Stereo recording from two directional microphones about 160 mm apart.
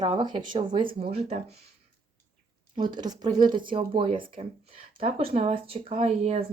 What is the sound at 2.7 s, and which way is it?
Speech, 30° right (ahead or behind).